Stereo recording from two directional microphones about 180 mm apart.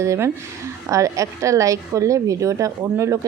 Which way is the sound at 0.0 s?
15° right (ahead or behind).